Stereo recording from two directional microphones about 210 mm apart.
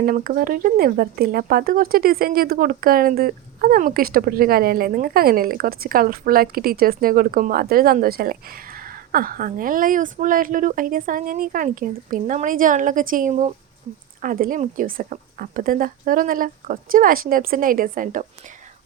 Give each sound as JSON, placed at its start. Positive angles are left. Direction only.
{"t": 0.0, "sound": "speech", "side_deg": -45}